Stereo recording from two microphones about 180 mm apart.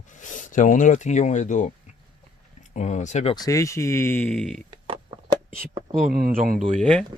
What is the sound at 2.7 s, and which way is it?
Speech, 40° left (ahead or behind).